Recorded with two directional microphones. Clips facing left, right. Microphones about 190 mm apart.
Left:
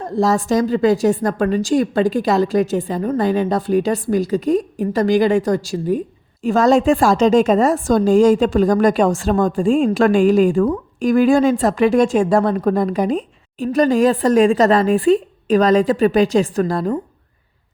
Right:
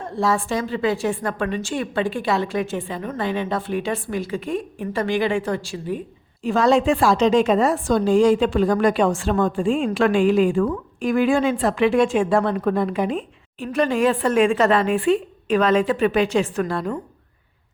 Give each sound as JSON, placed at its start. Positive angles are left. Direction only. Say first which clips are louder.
{"t": 0.0, "sound": "a woman's voice", "louder": "left 5 dB", "side_deg": 40}